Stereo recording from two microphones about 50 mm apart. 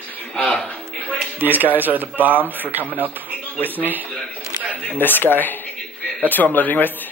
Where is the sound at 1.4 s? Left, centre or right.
Right.